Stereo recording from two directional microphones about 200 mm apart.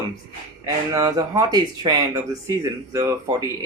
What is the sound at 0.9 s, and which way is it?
Speech, 15° right (ahead or behind).